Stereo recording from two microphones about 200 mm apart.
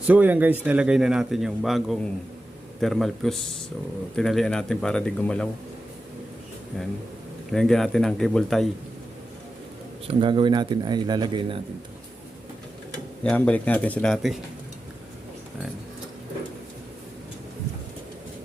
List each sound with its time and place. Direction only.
0.1 s a man's voice: 10° right (ahead or behind)
7.5 s a man's voice: 5° left (ahead or behind)
10.1 s a man's voice: 25° right (ahead or behind)
13.2 s a man's voice: 5° left (ahead or behind)